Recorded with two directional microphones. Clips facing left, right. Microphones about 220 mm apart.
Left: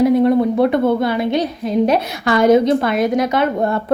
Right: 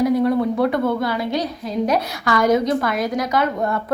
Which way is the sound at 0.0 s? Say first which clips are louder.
Left 4 dB; 25° left (ahead or behind).